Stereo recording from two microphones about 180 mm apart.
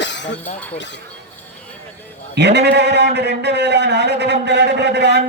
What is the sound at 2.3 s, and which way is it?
A man's voice, 70° right (ahead or behind).